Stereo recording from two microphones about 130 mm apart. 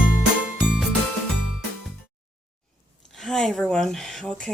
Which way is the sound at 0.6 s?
5° right (ahead or behind).